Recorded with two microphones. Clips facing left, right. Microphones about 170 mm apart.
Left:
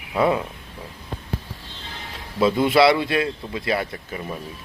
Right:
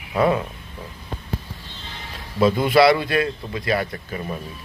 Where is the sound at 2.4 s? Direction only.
25° left (ahead or behind).